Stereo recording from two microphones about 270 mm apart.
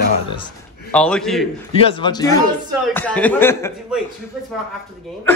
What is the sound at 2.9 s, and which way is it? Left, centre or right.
Speech, centre.